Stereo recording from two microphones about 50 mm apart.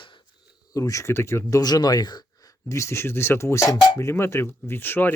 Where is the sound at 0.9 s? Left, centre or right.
Left.